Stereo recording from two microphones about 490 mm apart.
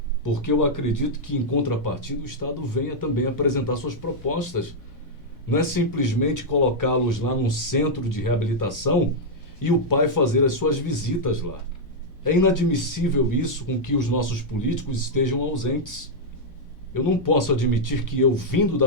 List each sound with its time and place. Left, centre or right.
0.2 s speech: left
5.5 s speech: left
16.9 s speech: left